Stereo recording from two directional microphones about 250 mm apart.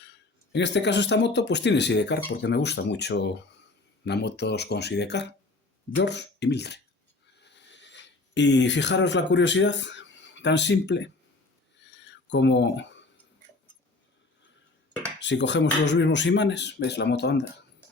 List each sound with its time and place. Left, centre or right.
0.5 s speech: left
12.0 s a sound: left
15.2 s speech: left